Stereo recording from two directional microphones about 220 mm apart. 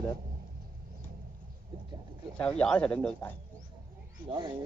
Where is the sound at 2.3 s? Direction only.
5° left (ahead or behind).